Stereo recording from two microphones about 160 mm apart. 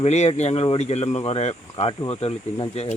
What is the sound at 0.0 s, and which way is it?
Speech, 45° left (ahead or behind).